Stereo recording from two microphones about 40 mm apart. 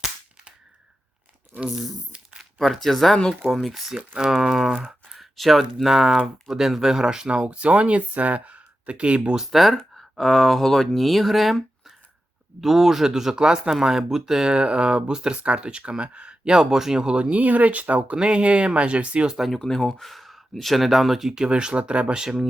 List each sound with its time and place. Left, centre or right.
1.7 s speech: centre
3.7 s speech: centre
4.3 s crumpling: centre
4.8 s a sound: centre
5.2 s speech: centre
7.3 s speech: right
9.3 s speech: centre; by 16.6 s right
16.6 s speech: centre
17.0 s speech: right
19.4 s speech: centre
19.6 s speech: centre
20.1 s speech: centre; by 22.2 s right
22.2 s speech: centre